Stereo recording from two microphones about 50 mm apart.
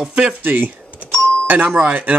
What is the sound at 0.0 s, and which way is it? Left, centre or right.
Speech, centre.